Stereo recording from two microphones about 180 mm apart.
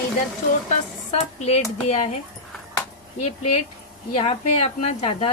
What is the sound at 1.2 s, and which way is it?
Speech, 35° left (ahead or behind).